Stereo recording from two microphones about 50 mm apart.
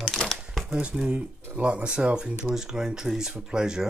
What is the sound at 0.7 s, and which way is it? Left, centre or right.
Speech, centre.